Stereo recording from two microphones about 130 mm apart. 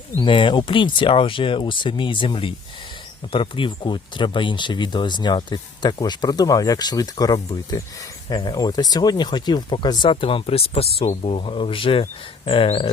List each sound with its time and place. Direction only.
0.2 s speech: 40° left (ahead or behind)